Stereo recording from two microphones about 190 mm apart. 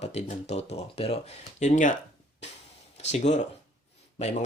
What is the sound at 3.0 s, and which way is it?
Speech, 35° left (ahead or behind).